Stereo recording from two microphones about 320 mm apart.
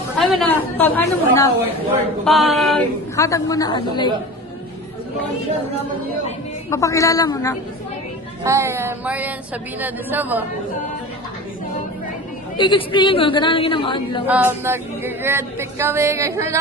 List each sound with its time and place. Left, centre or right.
0.2 s chatter: centre
2.2 s a woman's voice: centre
6.7 s a woman's voice: centre
8.4 s a capella: centre
9.8 s a woman's voice: centre
12.5 s a woman's voice: centre
14.3 s a capella: centre